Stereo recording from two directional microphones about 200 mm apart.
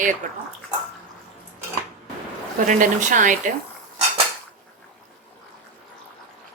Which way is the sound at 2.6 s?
40° right (ahead or behind).